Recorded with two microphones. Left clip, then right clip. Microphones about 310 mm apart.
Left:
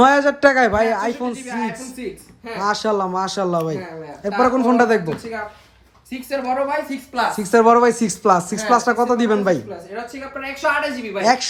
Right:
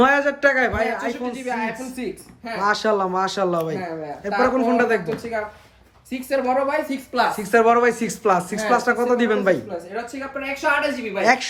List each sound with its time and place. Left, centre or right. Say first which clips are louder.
0.0 s a man's voice: left 4 dB; centre
1.3 s a woman's voice: even; centre
2.6 s a man's voice: even; centre
6.1 s a woman's voice: right 1 dB; centre
7.3 s a man's voice: left 5 dB; centre